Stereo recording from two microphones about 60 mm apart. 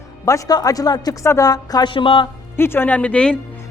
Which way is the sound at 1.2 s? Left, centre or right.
Left.